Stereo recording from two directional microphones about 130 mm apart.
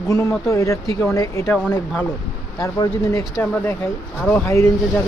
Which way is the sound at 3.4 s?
15° left (ahead or behind).